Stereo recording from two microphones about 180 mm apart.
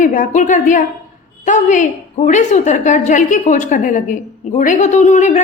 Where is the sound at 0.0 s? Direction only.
45° left (ahead or behind).